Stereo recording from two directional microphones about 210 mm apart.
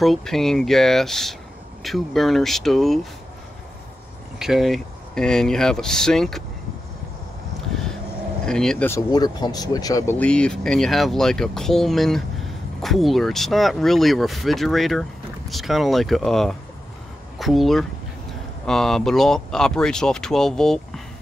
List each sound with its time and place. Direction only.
0.0 s speech: centre (ahead or behind)
4.4 s speech: centre (ahead or behind)
8.5 s speech: 5° left (ahead or behind)